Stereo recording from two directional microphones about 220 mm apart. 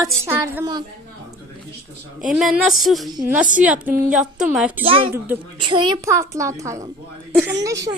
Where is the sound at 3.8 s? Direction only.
40° right (ahead or behind).